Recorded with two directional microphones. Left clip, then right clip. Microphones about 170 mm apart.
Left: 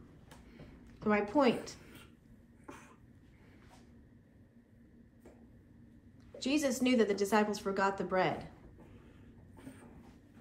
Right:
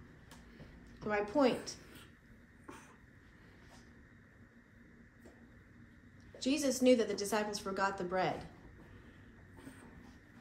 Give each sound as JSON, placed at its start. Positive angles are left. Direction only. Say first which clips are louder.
{"t": 1.0, "sound": "a woman's voice", "louder": "left 2 dB", "side_deg": 55}
{"t": 6.4, "sound": "a woman's voice", "louder": "right 1 dB", "side_deg": 55}